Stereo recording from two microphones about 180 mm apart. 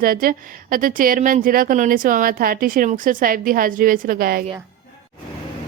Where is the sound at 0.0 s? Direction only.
55° right (ahead or behind).